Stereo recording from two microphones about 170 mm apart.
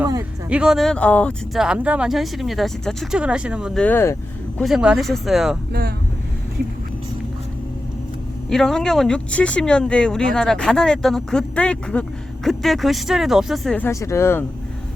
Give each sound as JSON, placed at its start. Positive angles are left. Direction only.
{"t": 0.0, "sound": "a sound", "side_deg": -20}
{"t": 0.5, "sound": "speech", "side_deg": -5}
{"t": 1.6, "sound": "speech", "side_deg": -5}
{"t": 3.8, "sound": "speech", "side_deg": 10}
{"t": 4.6, "sound": "speech", "side_deg": -5}
{"t": 8.4, "sound": "speech", "side_deg": 5}
{"t": 13.7, "sound": "speech", "side_deg": 15}